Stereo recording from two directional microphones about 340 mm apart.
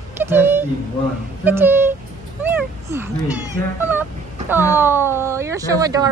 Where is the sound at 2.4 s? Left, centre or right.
Centre.